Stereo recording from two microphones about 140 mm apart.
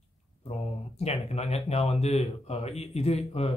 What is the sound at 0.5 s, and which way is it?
Speech, 50° left (ahead or behind).